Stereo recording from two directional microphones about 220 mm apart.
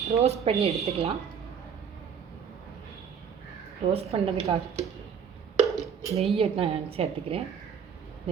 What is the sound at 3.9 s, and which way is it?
Speech, 30° right (ahead or behind).